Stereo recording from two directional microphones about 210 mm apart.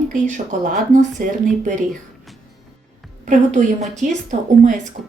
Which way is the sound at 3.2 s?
35° right (ahead or behind).